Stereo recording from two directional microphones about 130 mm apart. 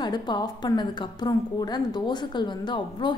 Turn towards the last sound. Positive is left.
turn(degrees=35)  # may be behind; listen again after turning